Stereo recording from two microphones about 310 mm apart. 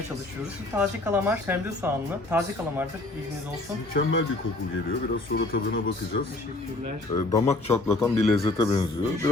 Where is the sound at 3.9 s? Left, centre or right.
Left.